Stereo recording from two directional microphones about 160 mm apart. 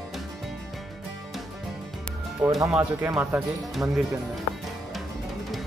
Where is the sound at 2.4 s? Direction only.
10° right (ahead or behind).